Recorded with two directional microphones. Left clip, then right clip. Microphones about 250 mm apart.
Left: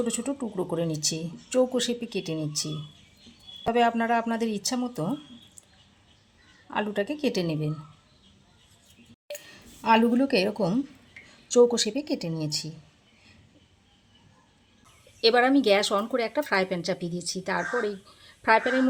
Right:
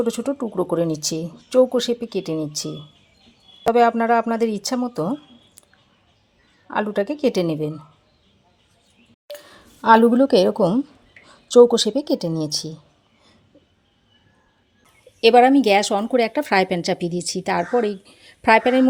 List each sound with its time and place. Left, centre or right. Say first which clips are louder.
0.0 s speech: right 7 dB; right
3.8 s speech: right 7 dB; right
6.7 s speech: right 6 dB; right
9.5 s speech: right 8 dB; right
15.2 s speech: right 8 dB; right